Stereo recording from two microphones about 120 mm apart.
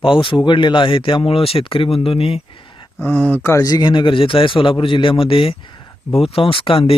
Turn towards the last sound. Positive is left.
turn(degrees=50)  # may be behind; listen again after turning